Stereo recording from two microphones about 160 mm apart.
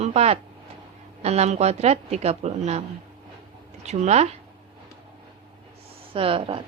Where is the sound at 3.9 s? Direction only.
45° right (ahead or behind).